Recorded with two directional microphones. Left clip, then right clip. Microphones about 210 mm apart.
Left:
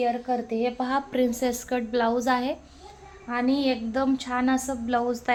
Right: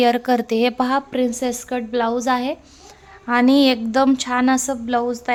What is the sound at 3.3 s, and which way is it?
A woman's voice, 35° right (ahead or behind).